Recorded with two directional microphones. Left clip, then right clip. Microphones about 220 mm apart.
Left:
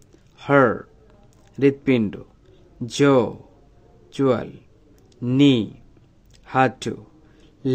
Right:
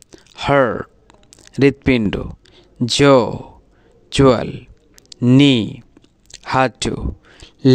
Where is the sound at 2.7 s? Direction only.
40° right (ahead or behind).